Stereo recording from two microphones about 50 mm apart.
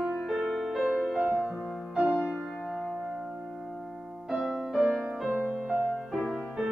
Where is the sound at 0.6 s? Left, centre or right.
Centre.